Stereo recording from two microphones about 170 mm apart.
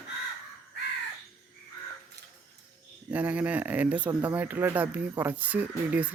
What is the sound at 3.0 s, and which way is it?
Speech, 10° right (ahead or behind).